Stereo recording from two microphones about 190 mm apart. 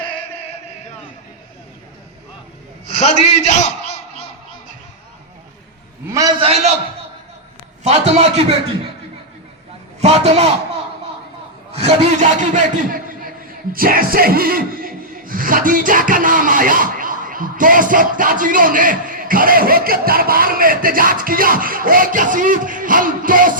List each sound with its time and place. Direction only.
2.9 s a sound: 35° left (ahead or behind)
6.1 s a sound: 15° right (ahead or behind)
6.4 s a man's voice: 30° right (ahead or behind)
7.9 s a man's voice: 35° right (ahead or behind)
10.0 s a man's voice: 35° right (ahead or behind)
11.7 s a man's voice: 35° right (ahead or behind)
13.7 s music: 50° right (ahead or behind)